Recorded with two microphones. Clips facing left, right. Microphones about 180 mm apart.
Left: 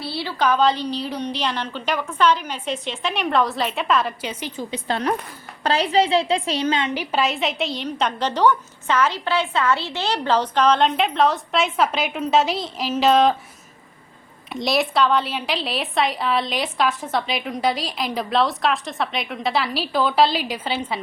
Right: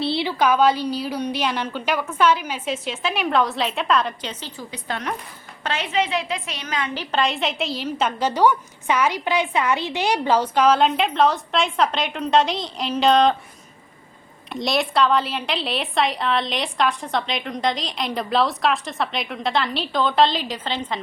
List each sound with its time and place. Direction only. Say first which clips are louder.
0.0 s a woman's voice: right 3 dB; 20° right (ahead or behind); by 6.9 s 25° left (ahead or behind)
6.9 s a woman's voice: left 1 dB; 10° left (ahead or behind)
14.5 s a woman's voice: left 1 dB; centre (ahead or behind)